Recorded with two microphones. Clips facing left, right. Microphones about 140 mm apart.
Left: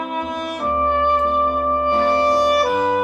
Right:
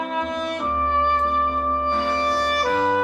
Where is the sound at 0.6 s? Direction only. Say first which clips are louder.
Left 6 dB; 35° left (ahead or behind).